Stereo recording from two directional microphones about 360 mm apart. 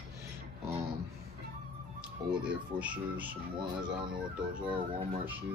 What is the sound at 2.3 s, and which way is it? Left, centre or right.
Speech, centre.